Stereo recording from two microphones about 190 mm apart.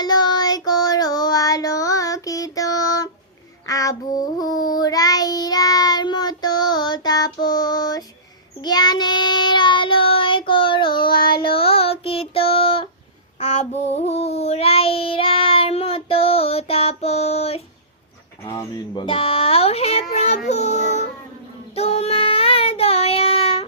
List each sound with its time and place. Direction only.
0.0 s child singing: 20° left (ahead or behind)
11.2 s child singing: 50° left (ahead or behind)
11.4 s music: 30° left (ahead or behind)
13.4 s child singing: 35° left (ahead or behind)